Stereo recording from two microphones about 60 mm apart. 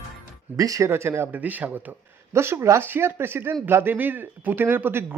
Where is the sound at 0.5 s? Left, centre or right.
Right.